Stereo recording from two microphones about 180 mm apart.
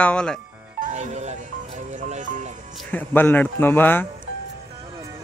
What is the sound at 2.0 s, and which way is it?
Music, 45° right (ahead or behind).